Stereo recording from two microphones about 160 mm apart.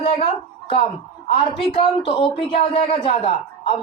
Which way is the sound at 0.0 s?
35° left (ahead or behind).